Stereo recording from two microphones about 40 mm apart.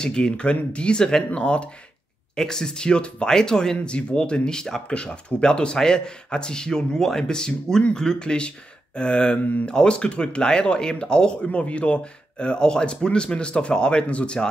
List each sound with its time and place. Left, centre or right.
0.0 s speech: left
2.3 s speech: centre